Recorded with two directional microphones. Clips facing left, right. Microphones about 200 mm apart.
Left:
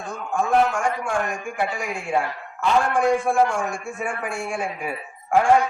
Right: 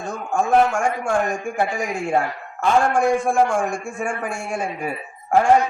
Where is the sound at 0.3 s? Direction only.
45° right (ahead or behind).